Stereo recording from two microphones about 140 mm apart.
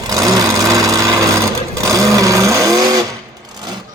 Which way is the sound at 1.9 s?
25° right (ahead or behind).